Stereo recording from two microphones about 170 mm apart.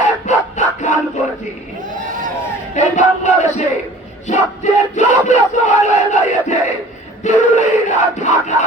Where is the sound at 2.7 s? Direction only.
45° left (ahead or behind).